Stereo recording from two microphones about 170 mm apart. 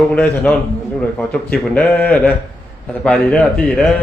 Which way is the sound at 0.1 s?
5° left (ahead or behind).